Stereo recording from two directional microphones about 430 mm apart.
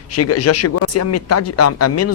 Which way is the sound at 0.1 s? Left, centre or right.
Left.